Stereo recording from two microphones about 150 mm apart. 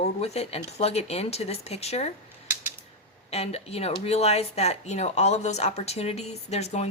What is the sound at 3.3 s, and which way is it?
A woman's voice, 45° left (ahead or behind).